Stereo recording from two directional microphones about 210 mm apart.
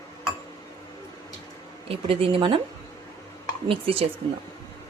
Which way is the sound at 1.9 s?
25° right (ahead or behind).